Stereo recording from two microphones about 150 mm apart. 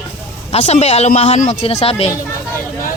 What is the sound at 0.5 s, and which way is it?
Speech, 45° left (ahead or behind).